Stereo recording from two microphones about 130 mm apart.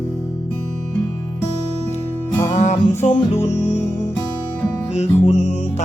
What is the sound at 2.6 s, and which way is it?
Music, 65° left (ahead or behind).